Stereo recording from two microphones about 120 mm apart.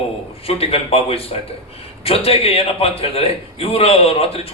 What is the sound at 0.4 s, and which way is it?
A man's voice, 55° left (ahead or behind).